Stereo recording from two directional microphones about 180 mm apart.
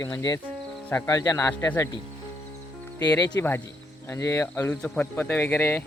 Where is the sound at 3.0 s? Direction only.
20° left (ahead or behind).